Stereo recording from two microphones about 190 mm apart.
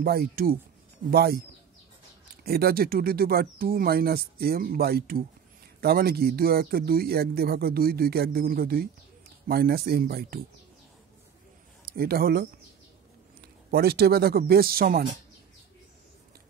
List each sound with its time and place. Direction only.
0.0 s speech: 55° right (ahead or behind)
2.4 s speech: 55° right (ahead or behind)
11.8 s speech: 50° right (ahead or behind)
13.7 s speech: 55° right (ahead or behind)